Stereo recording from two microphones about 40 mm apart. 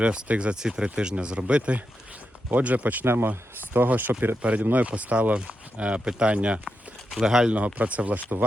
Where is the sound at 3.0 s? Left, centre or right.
Right.